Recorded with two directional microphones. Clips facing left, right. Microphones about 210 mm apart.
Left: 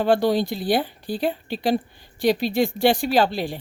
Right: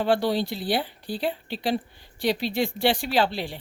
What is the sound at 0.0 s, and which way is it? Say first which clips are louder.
A woman's voice: left 4 dB; 45° left (ahead or behind).